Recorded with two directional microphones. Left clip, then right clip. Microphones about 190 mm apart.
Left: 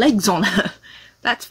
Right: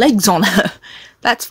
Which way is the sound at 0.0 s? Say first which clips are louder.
Right 4 dB; 50° right (ahead or behind).